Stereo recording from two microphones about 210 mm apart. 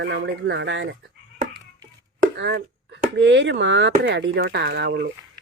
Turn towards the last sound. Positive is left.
turn(degrees=-50)  # may be behind; listen again after turning